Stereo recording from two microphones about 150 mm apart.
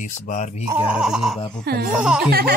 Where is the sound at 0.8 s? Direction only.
5° right (ahead or behind).